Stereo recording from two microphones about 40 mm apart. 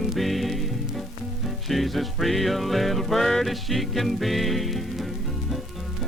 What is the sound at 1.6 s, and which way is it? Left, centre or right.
Music, centre.